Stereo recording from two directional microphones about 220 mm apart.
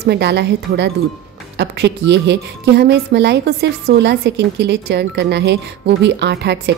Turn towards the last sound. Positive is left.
turn(degrees=-50)  # may be behind; listen again after turning